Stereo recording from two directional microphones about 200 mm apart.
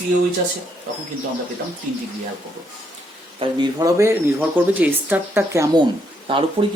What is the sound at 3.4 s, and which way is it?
Speech, 20° right (ahead or behind).